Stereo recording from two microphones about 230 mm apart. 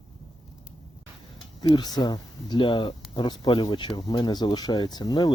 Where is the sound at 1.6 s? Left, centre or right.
Centre.